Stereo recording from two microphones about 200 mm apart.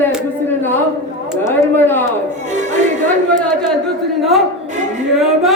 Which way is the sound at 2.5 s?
35° right (ahead or behind).